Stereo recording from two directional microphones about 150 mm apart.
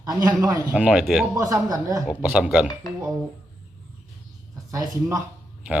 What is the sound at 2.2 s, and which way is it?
Speech, 10° right (ahead or behind).